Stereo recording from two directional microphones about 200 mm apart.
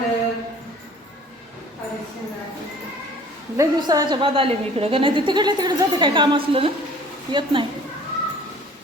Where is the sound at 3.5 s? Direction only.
20° right (ahead or behind).